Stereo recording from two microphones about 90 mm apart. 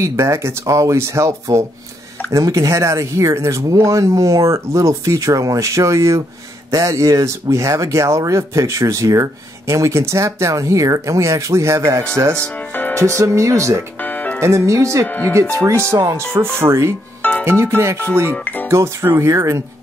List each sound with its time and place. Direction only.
0.0 s speech: 35° right (ahead or behind)
12.4 s music: 15° left (ahead or behind)
12.9 s speech: 35° right (ahead or behind)
13.9 s music: 20° left (ahead or behind)
14.4 s speech: 35° right (ahead or behind)
15.0 s music: 20° left (ahead or behind)
15.5 s speech: 35° right (ahead or behind)
17.2 s music: 15° left (ahead or behind)
17.5 s speech: 30° right (ahead or behind)
18.3 s speech: 20° left (ahead or behind)
18.7 s speech: 30° right (ahead or behind)